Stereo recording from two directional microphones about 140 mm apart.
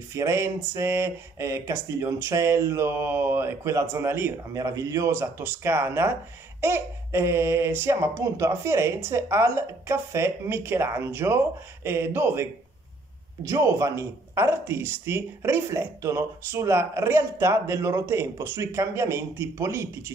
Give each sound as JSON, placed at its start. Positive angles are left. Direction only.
{"t": 0.1, "sound": "speech", "side_deg": -20}
{"t": 13.5, "sound": "speech", "side_deg": -20}